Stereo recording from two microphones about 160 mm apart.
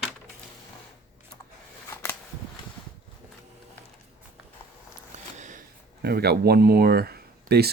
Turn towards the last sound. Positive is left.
turn(degrees=-80)